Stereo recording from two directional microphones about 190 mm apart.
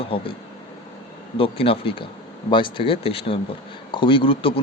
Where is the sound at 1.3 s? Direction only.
30° left (ahead or behind).